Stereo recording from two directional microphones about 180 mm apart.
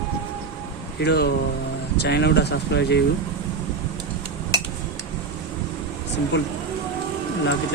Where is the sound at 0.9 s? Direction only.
65° left (ahead or behind).